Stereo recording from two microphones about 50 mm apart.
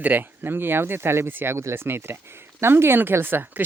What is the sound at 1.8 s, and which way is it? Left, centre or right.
Speech, right.